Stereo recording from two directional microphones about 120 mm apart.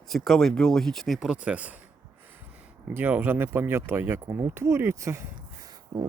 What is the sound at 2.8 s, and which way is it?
Speech, 15° right (ahead or behind).